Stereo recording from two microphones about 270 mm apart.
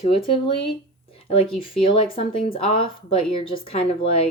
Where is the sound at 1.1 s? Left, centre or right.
Left.